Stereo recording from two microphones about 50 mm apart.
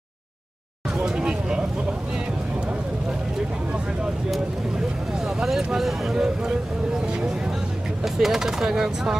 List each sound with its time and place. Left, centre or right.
0.9 s a sound: centre
4.7 s vehicle: centre
8.0 s speech: centre